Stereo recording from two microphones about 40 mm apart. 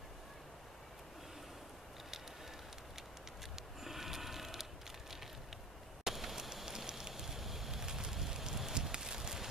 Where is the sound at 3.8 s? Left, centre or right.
Centre.